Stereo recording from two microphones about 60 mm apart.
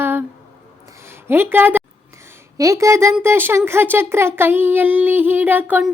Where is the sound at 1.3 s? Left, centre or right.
Right.